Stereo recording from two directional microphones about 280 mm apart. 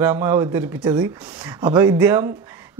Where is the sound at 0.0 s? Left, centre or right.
Centre.